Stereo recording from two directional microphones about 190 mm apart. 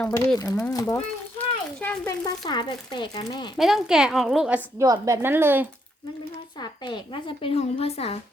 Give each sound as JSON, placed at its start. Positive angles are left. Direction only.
{"t": 0.3, "sound": "a woman's voice", "side_deg": 20}
{"t": 1.4, "sound": "a sound", "side_deg": 10}
{"t": 2.0, "sound": "a woman's voice", "side_deg": 20}
{"t": 3.6, "sound": "a woman's voice", "side_deg": 0}
{"t": 4.8, "sound": "a woman's voice", "side_deg": -15}
{"t": 6.6, "sound": "a woman's voice", "side_deg": 25}